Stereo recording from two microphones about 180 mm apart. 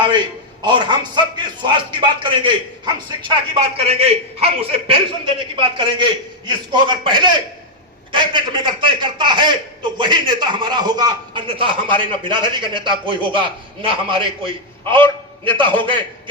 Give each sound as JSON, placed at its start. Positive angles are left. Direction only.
{"t": 0.6, "sound": "a man's voice", "side_deg": -25}